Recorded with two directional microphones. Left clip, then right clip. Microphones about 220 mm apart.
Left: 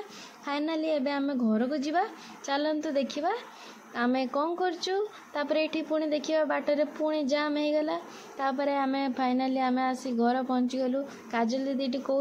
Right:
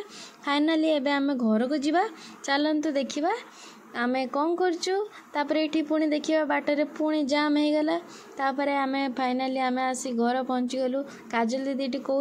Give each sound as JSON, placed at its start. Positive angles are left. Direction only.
{"t": 0.5, "sound": "speech", "side_deg": -40}